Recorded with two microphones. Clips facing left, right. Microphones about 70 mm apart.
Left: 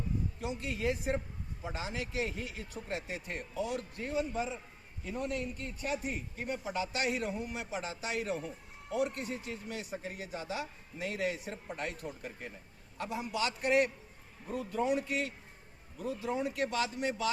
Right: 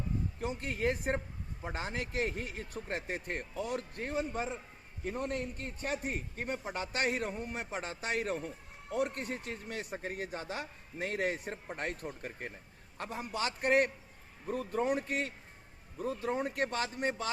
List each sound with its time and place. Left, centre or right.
0.3 s a man's voice: right